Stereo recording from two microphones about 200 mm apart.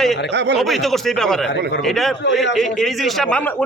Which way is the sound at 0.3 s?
60° right (ahead or behind).